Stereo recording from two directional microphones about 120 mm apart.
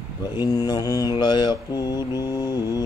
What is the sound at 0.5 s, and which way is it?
Mantra, 30° left (ahead or behind).